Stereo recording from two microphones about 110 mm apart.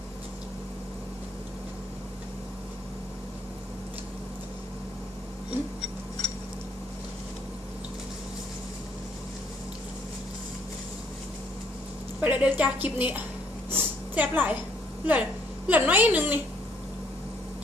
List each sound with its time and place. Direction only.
12.2 s a woman's voice: 15° right (ahead or behind)
13.7 s a sound: 20° right (ahead or behind)
15.0 s a woman's voice: 15° right (ahead or behind)